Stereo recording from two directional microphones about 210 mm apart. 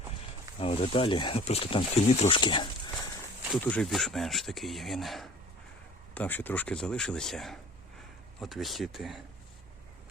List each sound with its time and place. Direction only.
0.6 s speech: 25° left (ahead or behind)
3.6 s speech: 5° left (ahead or behind)